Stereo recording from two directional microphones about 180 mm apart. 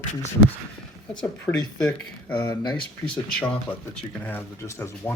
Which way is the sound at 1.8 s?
5° left (ahead or behind).